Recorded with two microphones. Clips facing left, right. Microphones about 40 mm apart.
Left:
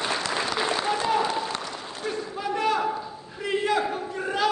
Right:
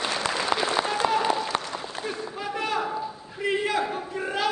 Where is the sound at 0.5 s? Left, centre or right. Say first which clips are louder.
Right 4 dB; right.